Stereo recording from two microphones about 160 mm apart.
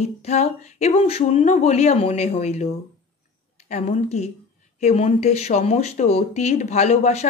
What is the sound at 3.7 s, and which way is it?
Speech, 45° left (ahead or behind).